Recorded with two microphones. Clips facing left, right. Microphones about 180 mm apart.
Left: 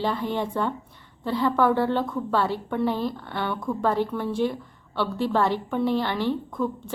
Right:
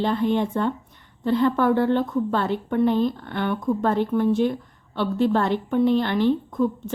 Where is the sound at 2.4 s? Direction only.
20° right (ahead or behind).